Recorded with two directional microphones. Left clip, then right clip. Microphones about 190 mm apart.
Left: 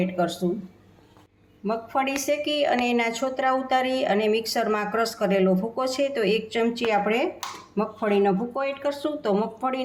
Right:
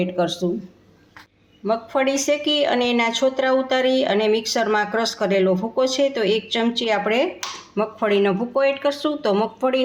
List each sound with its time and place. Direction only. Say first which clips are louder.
0.0 s speech: right 4 dB; 25° right (ahead or behind)
1.6 s speech: right 5 dB; 25° right (ahead or behind)